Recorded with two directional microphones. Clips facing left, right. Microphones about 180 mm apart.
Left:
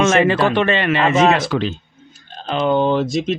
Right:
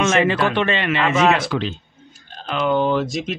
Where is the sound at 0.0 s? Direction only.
40° left (ahead or behind).